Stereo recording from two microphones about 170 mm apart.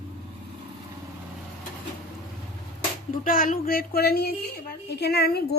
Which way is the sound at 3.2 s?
55° left (ahead or behind).